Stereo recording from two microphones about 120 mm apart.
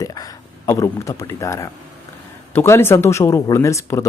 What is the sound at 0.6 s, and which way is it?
Speech, 30° left (ahead or behind).